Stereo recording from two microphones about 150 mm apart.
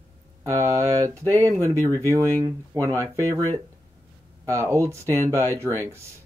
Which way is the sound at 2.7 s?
30° right (ahead or behind).